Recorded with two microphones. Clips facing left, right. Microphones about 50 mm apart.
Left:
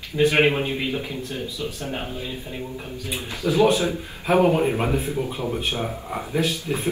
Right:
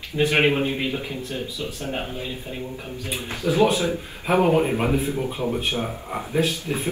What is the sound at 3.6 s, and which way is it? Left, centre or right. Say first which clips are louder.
Speech: left 2 dB; left.